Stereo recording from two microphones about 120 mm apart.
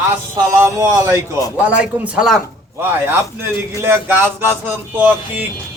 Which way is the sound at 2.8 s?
15° right (ahead or behind).